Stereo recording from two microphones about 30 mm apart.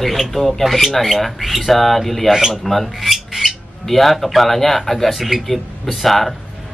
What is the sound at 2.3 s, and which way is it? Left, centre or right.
Speech, centre.